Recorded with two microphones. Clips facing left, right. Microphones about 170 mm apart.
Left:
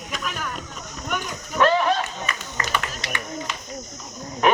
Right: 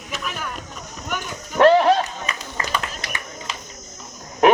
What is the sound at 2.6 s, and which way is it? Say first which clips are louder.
Music: right 1 dB; 25° right (ahead or behind).